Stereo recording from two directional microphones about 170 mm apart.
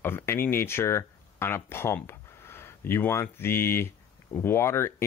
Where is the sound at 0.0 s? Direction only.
15° left (ahead or behind).